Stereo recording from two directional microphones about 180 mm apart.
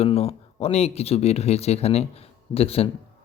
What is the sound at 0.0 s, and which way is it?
A man's voice, 35° left (ahead or behind).